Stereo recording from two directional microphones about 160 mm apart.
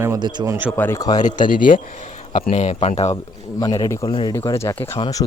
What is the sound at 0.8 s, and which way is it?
Speech, 20° left (ahead or behind).